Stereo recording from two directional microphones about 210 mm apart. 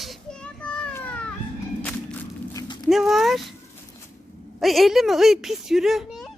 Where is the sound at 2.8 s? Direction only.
Centre (ahead or behind).